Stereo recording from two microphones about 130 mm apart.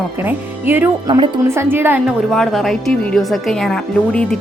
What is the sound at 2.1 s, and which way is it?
A woman's voice, centre (ahead or behind).